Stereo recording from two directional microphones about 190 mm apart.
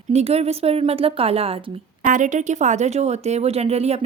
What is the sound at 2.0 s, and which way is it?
Speech, 40° right (ahead or behind).